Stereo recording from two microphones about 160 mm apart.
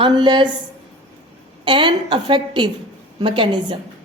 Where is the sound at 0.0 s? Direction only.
30° right (ahead or behind).